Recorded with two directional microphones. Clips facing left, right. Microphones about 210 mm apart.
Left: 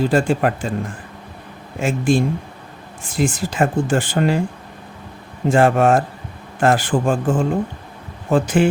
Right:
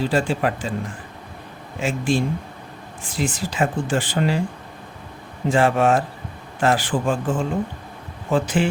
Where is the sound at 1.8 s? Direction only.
50° left (ahead or behind).